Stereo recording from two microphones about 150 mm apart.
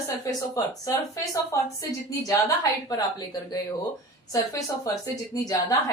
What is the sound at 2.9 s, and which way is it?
Speech, 25° left (ahead or behind).